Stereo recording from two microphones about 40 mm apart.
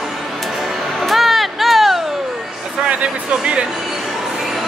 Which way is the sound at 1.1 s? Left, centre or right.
Centre.